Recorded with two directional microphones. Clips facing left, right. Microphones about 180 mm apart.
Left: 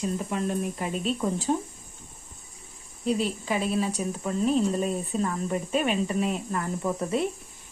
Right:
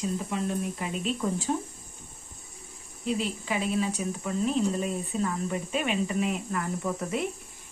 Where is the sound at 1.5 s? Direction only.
25° left (ahead or behind).